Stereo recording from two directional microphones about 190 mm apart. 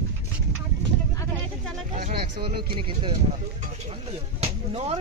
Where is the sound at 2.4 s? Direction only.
30° right (ahead or behind).